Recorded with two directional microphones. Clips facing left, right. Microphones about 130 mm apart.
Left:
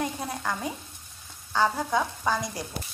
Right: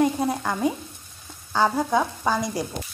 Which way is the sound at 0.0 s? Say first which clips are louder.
Right 9 dB; 25° right (ahead or behind).